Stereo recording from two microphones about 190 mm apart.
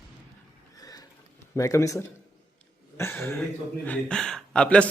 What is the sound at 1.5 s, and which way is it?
Speech, 15° left (ahead or behind).